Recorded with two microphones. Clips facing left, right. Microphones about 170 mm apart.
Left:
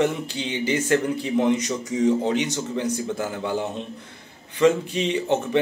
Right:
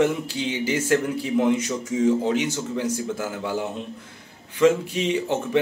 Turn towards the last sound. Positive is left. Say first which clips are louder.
# left 1 dB
turn(degrees=-5)  # may be behind; listen again after turning